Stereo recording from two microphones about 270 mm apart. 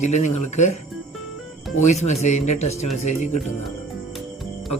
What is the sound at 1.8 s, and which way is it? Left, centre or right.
Speech, left.